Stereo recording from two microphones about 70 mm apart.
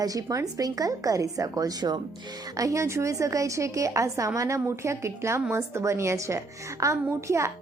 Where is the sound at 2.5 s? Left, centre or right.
Right.